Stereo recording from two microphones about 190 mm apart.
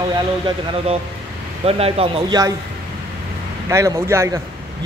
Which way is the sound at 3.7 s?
15° right (ahead or behind).